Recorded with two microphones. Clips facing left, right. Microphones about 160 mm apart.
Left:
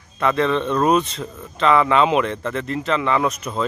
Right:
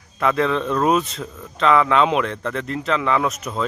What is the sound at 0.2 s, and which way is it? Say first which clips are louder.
Speech: left 1 dB; centre (ahead or behind).